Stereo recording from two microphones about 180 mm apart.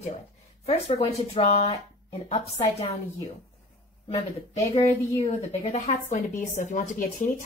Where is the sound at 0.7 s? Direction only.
35° left (ahead or behind).